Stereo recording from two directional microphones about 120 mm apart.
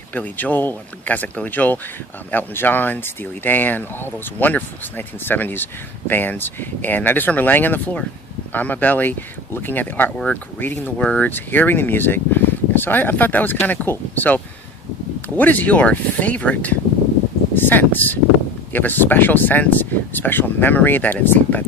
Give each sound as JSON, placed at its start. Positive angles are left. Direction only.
{"t": 0.1, "sound": "speech", "side_deg": 15}